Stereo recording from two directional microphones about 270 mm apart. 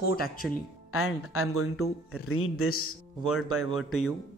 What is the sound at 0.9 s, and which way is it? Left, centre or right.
Speech, left.